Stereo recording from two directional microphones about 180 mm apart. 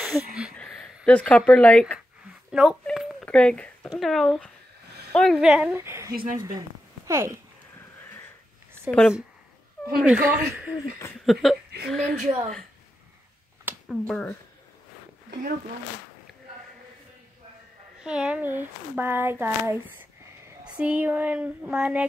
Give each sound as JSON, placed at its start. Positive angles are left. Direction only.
{"t": 0.0, "sound": "speech", "side_deg": 0}
{"t": 2.5, "sound": "a sound", "side_deg": -5}
{"t": 3.9, "sound": "speech", "side_deg": 0}
{"t": 6.1, "sound": "speech", "side_deg": -50}
{"t": 7.1, "sound": "speech", "side_deg": -15}
{"t": 8.9, "sound": "speech", "side_deg": 0}
{"t": 11.4, "sound": "speech", "side_deg": 0}
{"t": 13.7, "sound": "speech", "side_deg": 0}
{"t": 18.0, "sound": "speech", "side_deg": -5}